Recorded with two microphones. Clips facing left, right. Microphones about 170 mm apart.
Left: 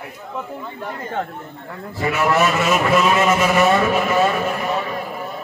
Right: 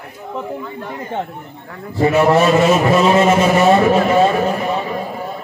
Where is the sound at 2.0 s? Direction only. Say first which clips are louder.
Right 6 dB; 30° right (ahead or behind).